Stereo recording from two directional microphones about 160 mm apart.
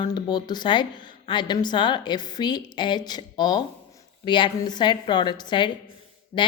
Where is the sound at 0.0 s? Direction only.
25° left (ahead or behind).